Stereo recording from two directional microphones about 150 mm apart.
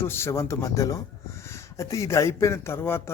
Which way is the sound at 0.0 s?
15° left (ahead or behind).